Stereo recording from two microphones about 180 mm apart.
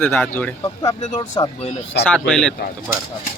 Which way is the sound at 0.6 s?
20° left (ahead or behind).